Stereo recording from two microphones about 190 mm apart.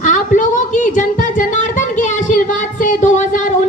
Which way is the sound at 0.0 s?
40° left (ahead or behind).